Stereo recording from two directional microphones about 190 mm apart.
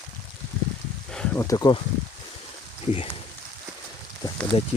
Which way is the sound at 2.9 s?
30° left (ahead or behind).